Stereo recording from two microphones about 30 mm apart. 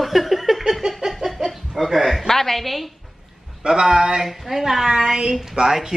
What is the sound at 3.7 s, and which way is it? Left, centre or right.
Speech, right.